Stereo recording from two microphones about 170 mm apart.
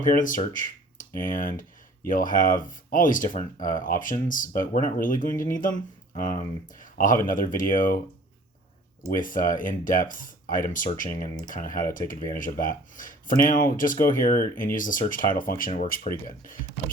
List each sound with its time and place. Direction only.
0.0 s speech: 50° left (ahead or behind)
9.1 s speech: 55° left (ahead or behind)